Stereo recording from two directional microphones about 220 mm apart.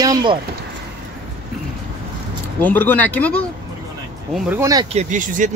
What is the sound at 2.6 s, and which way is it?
Speech, 10° left (ahead or behind).